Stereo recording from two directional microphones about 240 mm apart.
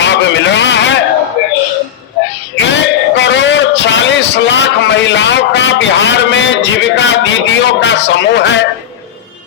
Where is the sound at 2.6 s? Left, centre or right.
Left.